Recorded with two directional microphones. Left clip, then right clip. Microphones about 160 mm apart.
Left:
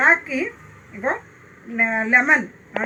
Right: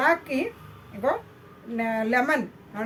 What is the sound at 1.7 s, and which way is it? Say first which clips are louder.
Speech: left 7 dB; 20° right (ahead or behind).